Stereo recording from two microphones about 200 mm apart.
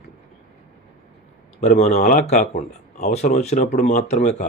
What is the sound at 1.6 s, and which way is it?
Speech, 35° left (ahead or behind).